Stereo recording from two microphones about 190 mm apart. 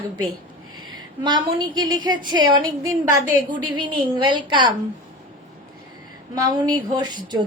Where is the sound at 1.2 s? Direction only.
25° right (ahead or behind).